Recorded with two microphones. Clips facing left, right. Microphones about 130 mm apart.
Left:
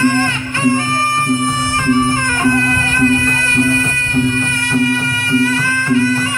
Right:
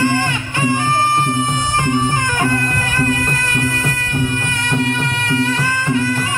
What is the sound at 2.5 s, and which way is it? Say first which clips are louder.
Music: left 4 dB; 15° right (ahead or behind).